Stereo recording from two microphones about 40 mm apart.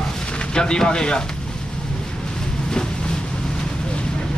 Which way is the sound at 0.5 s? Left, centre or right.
Left.